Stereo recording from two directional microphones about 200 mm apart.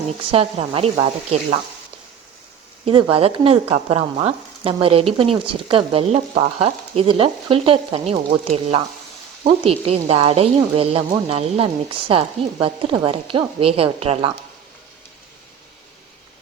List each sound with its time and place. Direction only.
0.3 s sizzle: 30° right (ahead or behind)
2.8 s sizzle: 25° right (ahead or behind)